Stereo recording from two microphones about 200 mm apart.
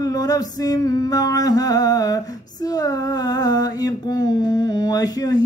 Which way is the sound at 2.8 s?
20° left (ahead or behind).